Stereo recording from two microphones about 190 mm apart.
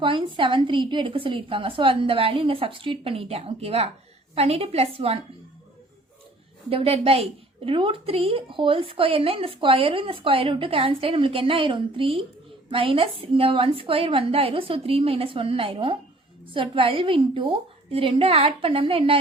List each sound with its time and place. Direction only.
0.0 s a woman's voice: 25° right (ahead or behind)
6.7 s a woman's voice: 30° right (ahead or behind)